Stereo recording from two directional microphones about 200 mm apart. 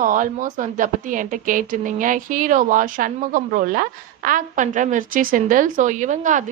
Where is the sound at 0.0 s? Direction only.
40° right (ahead or behind).